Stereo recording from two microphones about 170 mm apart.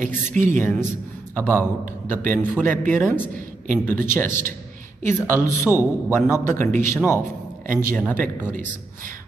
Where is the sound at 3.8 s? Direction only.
10° left (ahead or behind).